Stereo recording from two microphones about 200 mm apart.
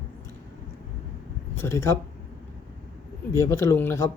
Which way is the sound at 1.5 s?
15° left (ahead or behind).